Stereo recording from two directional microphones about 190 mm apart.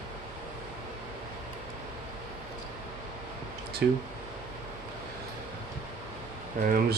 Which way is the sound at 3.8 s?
60° right (ahead or behind).